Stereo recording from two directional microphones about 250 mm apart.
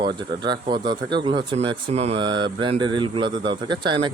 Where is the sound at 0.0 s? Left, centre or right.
Centre.